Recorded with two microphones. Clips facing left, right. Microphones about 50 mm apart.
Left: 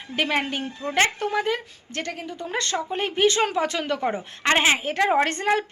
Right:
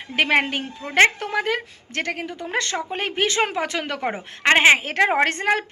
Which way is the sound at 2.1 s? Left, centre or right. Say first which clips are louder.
Right 4 dB; right.